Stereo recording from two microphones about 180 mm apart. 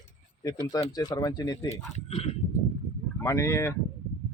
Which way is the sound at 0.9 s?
20° left (ahead or behind).